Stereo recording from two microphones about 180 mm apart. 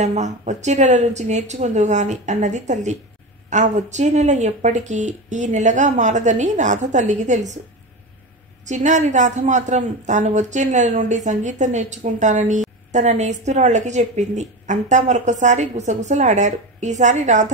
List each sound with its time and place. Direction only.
0.0 s a woman's voice: 40° right (ahead or behind)
8.6 s a woman's voice: 40° right (ahead or behind)